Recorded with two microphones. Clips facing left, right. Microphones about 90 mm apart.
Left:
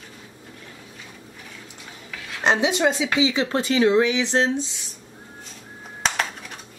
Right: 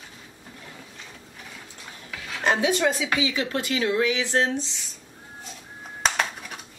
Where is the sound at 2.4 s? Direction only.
20° left (ahead or behind).